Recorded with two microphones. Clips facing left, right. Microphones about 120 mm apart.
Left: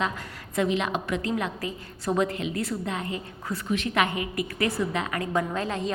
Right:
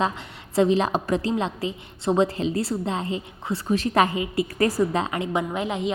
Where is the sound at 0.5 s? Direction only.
35° right (ahead or behind).